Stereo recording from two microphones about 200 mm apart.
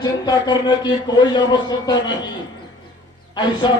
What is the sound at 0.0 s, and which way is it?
A man's voice, 20° left (ahead or behind).